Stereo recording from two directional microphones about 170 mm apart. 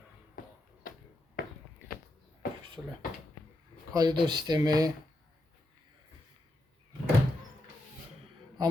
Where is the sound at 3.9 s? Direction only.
25° right (ahead or behind).